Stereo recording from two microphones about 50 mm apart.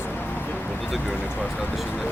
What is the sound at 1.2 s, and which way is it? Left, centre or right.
Speech, left.